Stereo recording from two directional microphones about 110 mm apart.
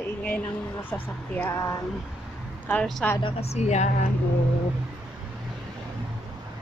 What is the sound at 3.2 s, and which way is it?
Speech, 60° left (ahead or behind).